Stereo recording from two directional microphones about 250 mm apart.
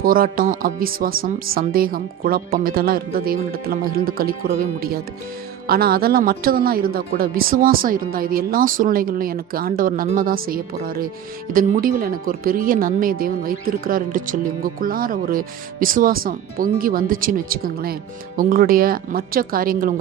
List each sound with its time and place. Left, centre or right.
0.0 s speech: right